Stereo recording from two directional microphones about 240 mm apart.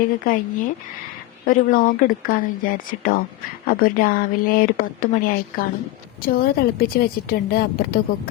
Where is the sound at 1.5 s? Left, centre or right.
Left.